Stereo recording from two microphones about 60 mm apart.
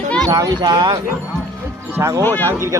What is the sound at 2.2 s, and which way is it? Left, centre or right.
Speech, left.